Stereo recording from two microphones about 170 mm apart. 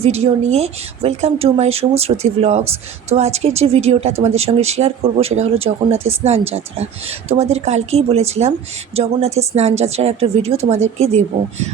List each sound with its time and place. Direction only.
0.0 s speech: 40° right (ahead or behind)